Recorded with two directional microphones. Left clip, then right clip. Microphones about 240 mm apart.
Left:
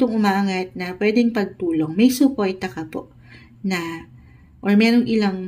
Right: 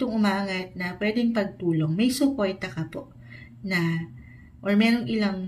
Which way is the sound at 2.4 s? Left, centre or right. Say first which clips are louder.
Left 4 dB; left.